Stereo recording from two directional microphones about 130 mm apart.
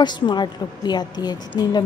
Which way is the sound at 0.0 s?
35° left (ahead or behind).